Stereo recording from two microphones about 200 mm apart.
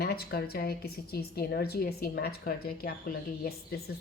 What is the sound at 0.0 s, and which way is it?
A woman's voice, 50° left (ahead or behind).